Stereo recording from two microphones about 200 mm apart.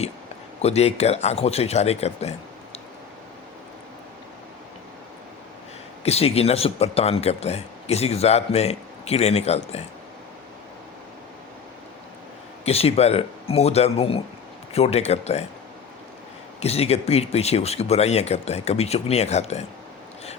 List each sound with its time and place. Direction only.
0.6 s speech: 30° left (ahead or behind)
6.1 s speech: 30° left (ahead or behind)
12.6 s speech: 30° left (ahead or behind)
16.6 s speech: 30° left (ahead or behind)